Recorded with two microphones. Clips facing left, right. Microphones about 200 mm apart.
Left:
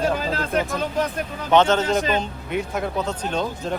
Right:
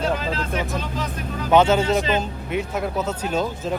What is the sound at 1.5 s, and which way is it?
A man's voice, 10° right (ahead or behind).